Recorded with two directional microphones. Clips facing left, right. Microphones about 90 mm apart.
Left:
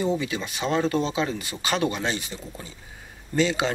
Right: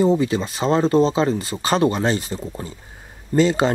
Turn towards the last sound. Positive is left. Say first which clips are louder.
# right 6 dB
turn(degrees=-40)  # may be behind; listen again after turning